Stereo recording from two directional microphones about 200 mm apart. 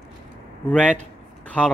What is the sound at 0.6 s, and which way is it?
Speech, 5° left (ahead or behind).